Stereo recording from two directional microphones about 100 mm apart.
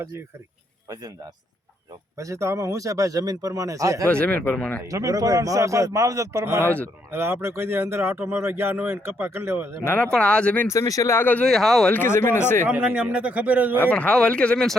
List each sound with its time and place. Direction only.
0.9 s a man's voice: 40° right (ahead or behind)
4.0 s speech: 10° left (ahead or behind)
4.8 s a man's voice: 35° right (ahead or behind)
9.8 s speech: 15° left (ahead or behind)
10.7 s speech: 30° left (ahead or behind)
11.4 s speech: centre (ahead or behind)
11.9 s speech: 20° left (ahead or behind)
12.6 s speech: 15° right (ahead or behind)
13.7 s speech: 15° left (ahead or behind)